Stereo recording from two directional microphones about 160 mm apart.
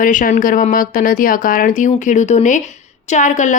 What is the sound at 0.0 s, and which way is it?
A woman's voice, 55° left (ahead or behind).